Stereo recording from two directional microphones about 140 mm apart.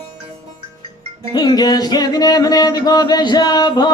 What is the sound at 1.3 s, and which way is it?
Music, 30° left (ahead or behind).